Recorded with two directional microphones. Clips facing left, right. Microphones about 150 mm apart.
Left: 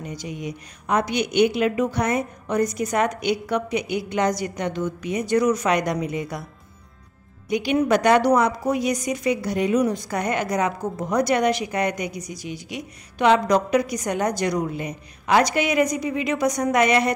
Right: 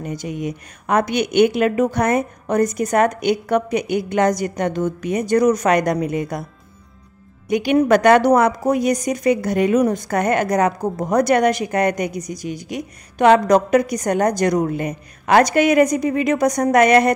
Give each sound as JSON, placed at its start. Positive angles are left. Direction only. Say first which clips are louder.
{"t": 0.0, "sound": "a woman's voice", "louder": "right 6 dB", "side_deg": -50}
{"t": 7.4, "sound": "a woman's voice", "louder": "right 5 dB", "side_deg": -55}